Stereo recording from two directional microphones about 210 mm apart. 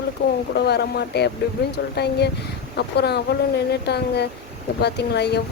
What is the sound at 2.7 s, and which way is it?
Speech, 50° left (ahead or behind).